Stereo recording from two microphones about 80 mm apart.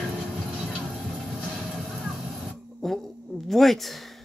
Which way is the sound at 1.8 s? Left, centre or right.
Centre.